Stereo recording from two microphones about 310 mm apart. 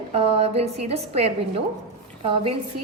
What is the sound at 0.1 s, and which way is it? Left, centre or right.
A woman's voice, centre.